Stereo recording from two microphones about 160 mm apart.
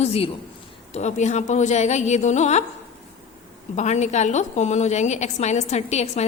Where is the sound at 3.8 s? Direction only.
45° left (ahead or behind).